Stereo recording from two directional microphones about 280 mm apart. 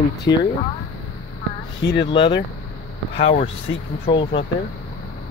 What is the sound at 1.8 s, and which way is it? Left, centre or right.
Speech, left.